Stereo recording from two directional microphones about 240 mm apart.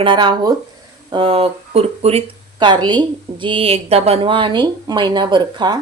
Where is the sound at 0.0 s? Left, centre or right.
Centre.